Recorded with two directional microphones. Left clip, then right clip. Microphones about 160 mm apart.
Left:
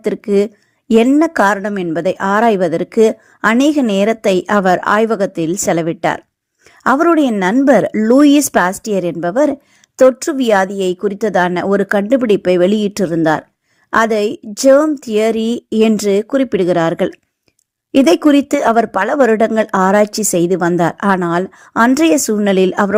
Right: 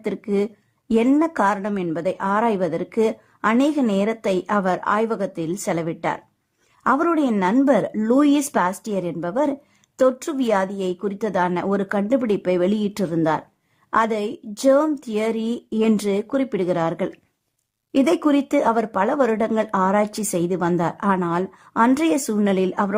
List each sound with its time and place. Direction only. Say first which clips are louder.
0.0 s a woman's voice: left 9 dB; 25° left (ahead or behind)